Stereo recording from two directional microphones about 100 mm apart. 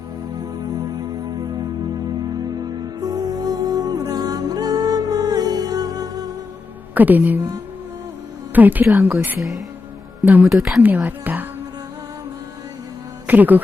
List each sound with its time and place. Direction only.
0.3 s music: 40° right (ahead or behind)
2.3 s music: 40° right (ahead or behind)
6.9 s a woman's voice: 15° right (ahead or behind)
8.5 s a woman's voice: 15° right (ahead or behind)
10.2 s a woman's voice: 15° right (ahead or behind)
10.5 s speech: 5° right (ahead or behind)
10.8 s a woman's voice: 15° right (ahead or behind)
13.2 s speech: 15° right (ahead or behind)